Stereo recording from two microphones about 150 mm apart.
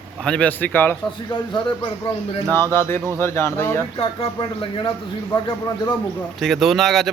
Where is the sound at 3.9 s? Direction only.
35° left (ahead or behind).